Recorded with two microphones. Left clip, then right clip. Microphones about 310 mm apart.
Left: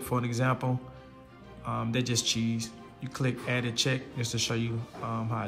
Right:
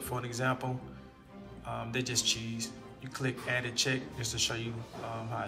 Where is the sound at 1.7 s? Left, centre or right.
Centre.